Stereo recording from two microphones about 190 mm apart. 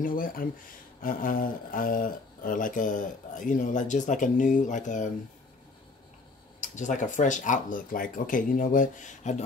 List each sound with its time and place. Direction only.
0.0 s speech: 50° left (ahead or behind)
6.6 s speech: 40° left (ahead or behind)